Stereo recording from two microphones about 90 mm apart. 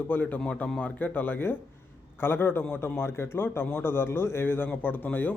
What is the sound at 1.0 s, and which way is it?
A man's voice, 20° left (ahead or behind).